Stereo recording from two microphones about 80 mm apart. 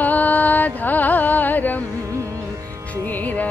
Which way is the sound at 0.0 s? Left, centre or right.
Left.